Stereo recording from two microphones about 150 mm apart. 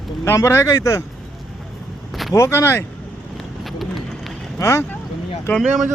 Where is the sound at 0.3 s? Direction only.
20° left (ahead or behind).